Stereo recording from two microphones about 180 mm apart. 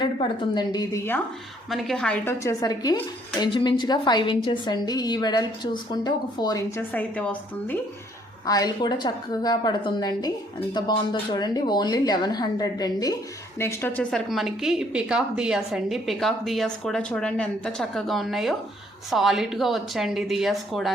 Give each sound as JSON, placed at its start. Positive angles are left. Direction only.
{"t": 0.0, "sound": "speech", "side_deg": 25}
{"t": 1.7, "sound": "a woman's voice", "side_deg": 5}
{"t": 2.4, "sound": "speech", "side_deg": 20}
{"t": 8.4, "sound": "a woman's voice", "side_deg": 20}